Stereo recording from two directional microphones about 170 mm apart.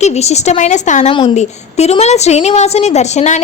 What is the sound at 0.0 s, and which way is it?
A woman's voice, 40° left (ahead or behind).